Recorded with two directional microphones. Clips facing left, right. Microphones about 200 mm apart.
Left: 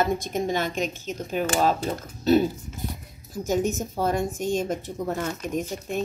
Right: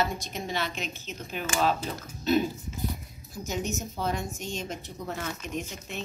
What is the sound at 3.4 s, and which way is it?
A woman's voice, 50° left (ahead or behind).